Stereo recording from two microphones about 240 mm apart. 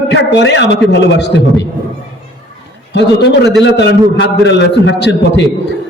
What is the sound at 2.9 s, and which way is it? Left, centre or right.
A man's voice, left.